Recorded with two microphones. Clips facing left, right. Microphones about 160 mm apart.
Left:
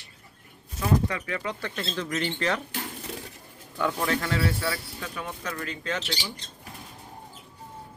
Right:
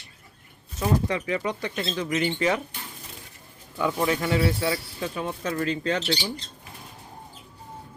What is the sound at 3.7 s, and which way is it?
Speech, 5° right (ahead or behind).